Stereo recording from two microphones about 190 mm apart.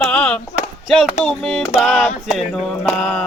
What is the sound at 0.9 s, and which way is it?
Speech, centre (ahead or behind).